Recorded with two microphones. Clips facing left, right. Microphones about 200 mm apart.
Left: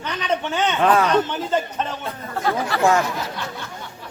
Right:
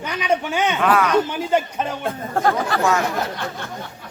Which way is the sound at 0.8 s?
30° left (ahead or behind).